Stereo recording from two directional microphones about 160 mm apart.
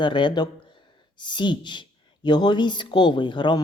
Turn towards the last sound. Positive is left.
turn(degrees=30)  # may be behind; listen again after turning